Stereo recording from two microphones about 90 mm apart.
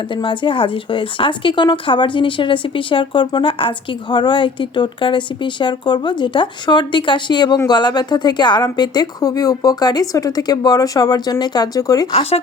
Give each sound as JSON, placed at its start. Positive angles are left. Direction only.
{"t": 0.1, "sound": "a woman's voice", "side_deg": 70}